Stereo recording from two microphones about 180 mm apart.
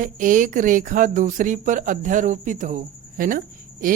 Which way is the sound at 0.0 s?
45° right (ahead or behind).